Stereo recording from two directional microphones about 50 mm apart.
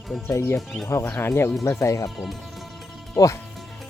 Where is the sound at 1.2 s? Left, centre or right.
Left.